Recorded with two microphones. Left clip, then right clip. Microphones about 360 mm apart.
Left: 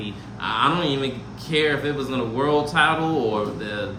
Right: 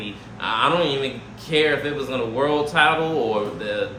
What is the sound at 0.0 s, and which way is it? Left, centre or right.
Speech, centre.